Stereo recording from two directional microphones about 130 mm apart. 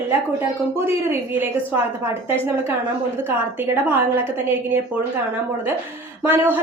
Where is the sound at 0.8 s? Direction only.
15° right (ahead or behind).